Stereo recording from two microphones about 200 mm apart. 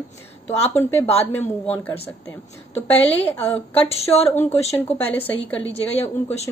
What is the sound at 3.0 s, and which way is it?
Speech, 10° left (ahead or behind).